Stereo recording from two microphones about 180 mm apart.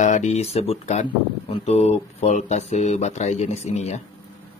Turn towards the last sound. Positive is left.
turn(degrees=40)  # may be behind; listen again after turning